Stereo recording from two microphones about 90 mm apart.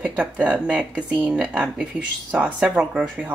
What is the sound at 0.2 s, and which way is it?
Speech, 15° right (ahead or behind).